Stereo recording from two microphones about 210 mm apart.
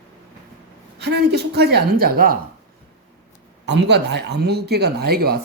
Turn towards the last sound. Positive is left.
turn(degrees=-45)  # may be behind; listen again after turning